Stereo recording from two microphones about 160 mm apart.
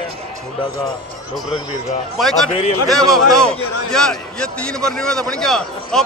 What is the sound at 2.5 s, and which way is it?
Speech, 40° left (ahead or behind).